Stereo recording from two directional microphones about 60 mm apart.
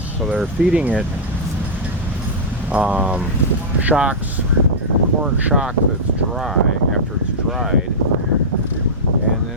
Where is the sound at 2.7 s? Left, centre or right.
Right.